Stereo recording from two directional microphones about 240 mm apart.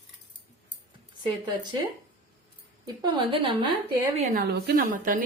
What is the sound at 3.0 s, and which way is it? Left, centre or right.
A woman's voice, centre.